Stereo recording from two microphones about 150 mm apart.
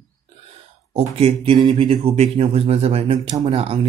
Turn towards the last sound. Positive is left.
turn(degrees=-40)  # may be behind; listen again after turning